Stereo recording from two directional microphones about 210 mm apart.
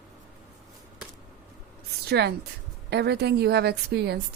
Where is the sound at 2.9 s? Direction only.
50° right (ahead or behind).